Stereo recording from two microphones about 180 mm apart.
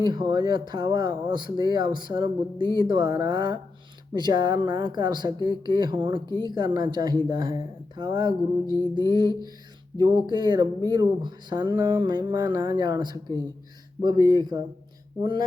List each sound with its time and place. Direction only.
0.0 s speech: 25° right (ahead or behind)